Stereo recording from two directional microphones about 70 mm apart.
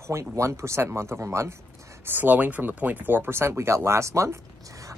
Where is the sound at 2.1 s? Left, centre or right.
Right.